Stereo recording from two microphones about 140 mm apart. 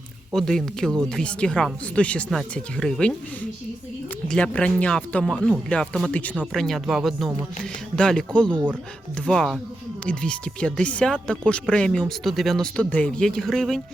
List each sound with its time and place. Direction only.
0.3 s speech: 5° left (ahead or behind)
4.3 s speech: 5° left (ahead or behind)